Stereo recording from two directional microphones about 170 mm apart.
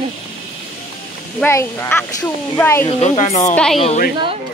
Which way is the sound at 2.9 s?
40° left (ahead or behind).